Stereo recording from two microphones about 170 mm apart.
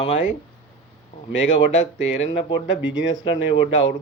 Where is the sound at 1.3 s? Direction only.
90° left.